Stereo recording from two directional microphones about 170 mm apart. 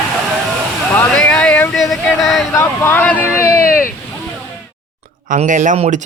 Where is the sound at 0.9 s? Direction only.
5° left (ahead or behind).